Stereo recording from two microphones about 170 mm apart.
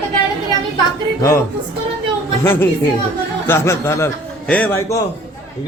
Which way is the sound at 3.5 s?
15° left (ahead or behind).